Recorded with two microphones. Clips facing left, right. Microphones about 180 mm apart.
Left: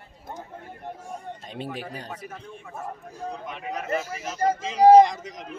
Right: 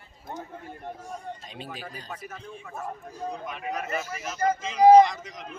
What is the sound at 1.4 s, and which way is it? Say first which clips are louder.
Speech: left 6 dB; 60° left (ahead or behind).